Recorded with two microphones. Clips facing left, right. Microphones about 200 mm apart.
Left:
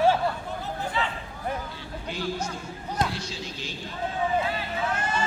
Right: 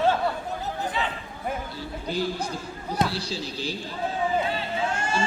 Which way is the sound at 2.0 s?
35° right (ahead or behind).